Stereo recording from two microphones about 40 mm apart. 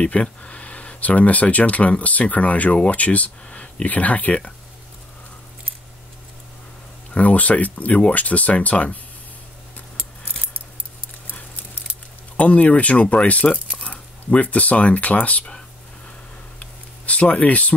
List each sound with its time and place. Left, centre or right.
0.0 s speech: left
7.2 s speech: left
12.4 s speech: left
16.5 s a sound: left